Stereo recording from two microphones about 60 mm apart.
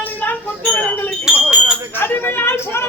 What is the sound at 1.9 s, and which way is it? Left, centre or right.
Speech, left.